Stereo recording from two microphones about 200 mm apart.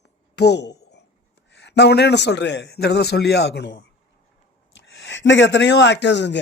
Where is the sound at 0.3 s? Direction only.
55° left (ahead or behind).